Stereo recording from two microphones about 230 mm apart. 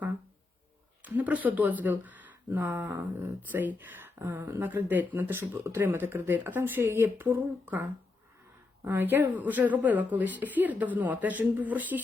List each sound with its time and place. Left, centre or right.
1.0 s speech: centre